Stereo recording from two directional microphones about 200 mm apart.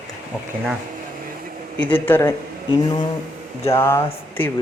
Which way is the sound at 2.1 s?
15° left (ahead or behind).